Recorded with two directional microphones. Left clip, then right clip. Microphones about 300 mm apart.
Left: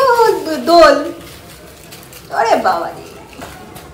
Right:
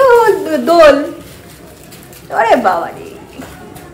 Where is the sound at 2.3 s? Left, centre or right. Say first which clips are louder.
Right 3 dB; centre.